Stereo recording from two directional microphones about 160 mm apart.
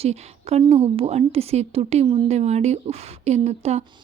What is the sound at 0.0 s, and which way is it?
A woman's voice, 40° right (ahead or behind).